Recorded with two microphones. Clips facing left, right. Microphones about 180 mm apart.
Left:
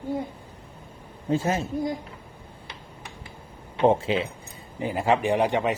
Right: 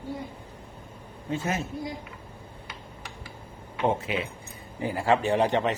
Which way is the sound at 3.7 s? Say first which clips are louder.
Left 6 dB; 30° left (ahead or behind).